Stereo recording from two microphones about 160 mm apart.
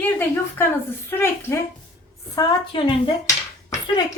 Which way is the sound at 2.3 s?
30° left (ahead or behind).